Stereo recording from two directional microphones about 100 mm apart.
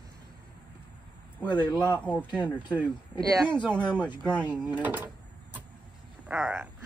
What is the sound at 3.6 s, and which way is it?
Speech, 50° left (ahead or behind).